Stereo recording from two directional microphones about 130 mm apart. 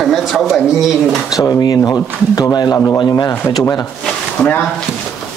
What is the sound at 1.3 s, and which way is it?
A man's voice, 30° left (ahead or behind).